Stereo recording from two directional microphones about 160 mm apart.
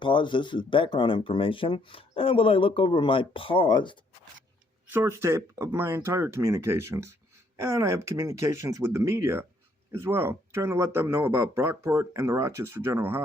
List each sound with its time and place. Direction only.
0.0 s speech: 30° left (ahead or behind)
4.9 s speech: 15° right (ahead or behind)